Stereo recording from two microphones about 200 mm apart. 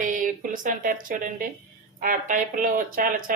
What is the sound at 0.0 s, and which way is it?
Speech, 40° right (ahead or behind).